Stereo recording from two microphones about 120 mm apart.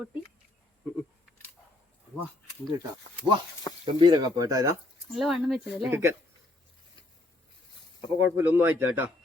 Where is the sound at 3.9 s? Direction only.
35° right (ahead or behind).